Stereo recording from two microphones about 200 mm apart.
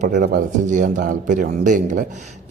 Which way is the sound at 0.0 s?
40° right (ahead or behind).